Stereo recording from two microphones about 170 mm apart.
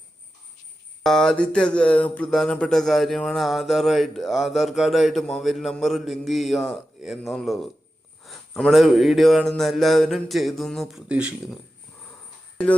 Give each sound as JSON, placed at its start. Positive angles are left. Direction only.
{"t": 1.0, "sound": "speech", "side_deg": 0}